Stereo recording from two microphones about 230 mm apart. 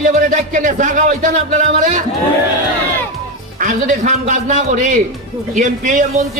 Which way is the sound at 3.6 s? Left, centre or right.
Right.